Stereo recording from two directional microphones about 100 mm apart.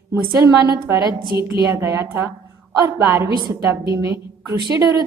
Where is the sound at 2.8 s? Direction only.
40° right (ahead or behind).